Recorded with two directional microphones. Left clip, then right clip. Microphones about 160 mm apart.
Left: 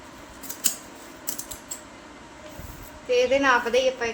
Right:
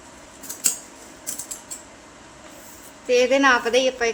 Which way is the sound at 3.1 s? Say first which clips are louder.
Right 3 dB; 90° right.